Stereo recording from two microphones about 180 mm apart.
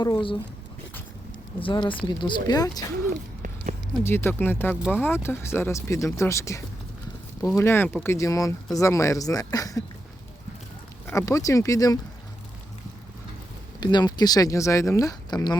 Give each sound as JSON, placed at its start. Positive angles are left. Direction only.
{"t": 0.0, "sound": "speech", "side_deg": 25}
{"t": 1.5, "sound": "speech", "side_deg": 25}
{"t": 3.1, "sound": "a sound", "side_deg": -50}
{"t": 4.0, "sound": "speech", "side_deg": 15}
{"t": 11.0, "sound": "speech", "side_deg": 15}
{"t": 13.7, "sound": "speech", "side_deg": 25}